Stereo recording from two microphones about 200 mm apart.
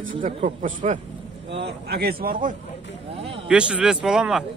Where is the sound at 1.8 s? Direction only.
50° right (ahead or behind).